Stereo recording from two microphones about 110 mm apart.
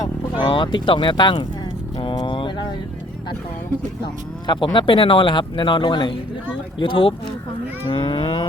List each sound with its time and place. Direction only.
0.3 s speech: 45° left (ahead or behind)
2.0 s a sound: 45° left (ahead or behind)
4.4 s speech: 45° left (ahead or behind)
7.9 s cattle: 50° left (ahead or behind)